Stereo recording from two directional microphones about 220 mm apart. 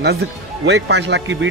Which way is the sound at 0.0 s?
50° right (ahead or behind).